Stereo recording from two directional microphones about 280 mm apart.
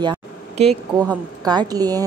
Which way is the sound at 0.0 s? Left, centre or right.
Centre.